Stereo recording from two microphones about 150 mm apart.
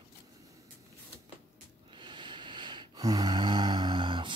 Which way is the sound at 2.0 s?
30° right (ahead or behind).